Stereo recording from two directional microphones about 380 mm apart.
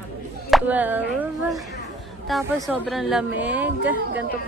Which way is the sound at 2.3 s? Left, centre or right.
Centre.